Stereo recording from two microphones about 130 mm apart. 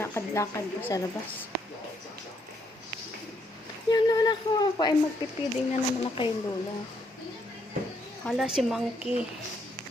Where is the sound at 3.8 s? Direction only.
30° left (ahead or behind).